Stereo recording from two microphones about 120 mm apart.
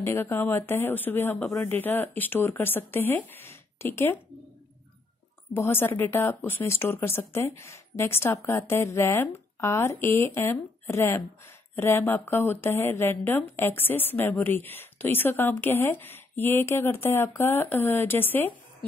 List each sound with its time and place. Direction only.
0.0 s speech: 20° left (ahead or behind)
5.5 s speech: 20° left (ahead or behind)